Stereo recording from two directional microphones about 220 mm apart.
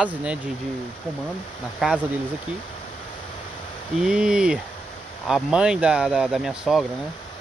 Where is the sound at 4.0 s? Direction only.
5° right (ahead or behind).